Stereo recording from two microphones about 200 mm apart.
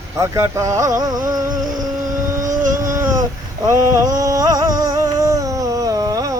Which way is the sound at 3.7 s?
15° right (ahead or behind).